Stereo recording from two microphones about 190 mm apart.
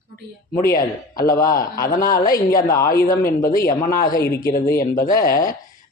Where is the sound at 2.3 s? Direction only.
50° left (ahead or behind).